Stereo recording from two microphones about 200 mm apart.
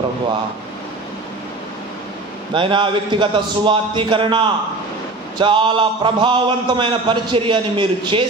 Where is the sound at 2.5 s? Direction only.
25° right (ahead or behind).